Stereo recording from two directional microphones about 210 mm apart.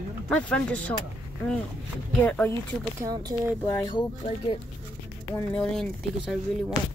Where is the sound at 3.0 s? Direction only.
20° right (ahead or behind).